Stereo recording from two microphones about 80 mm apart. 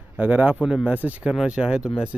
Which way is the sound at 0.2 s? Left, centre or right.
Centre.